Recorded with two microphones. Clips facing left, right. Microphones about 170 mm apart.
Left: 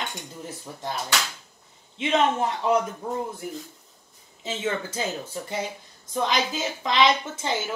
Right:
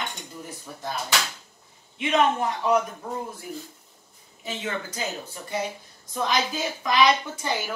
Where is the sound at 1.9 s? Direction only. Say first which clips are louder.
Even; 25° left (ahead or behind).